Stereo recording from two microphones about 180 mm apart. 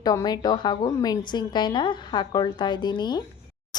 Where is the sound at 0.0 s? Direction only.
20° left (ahead or behind).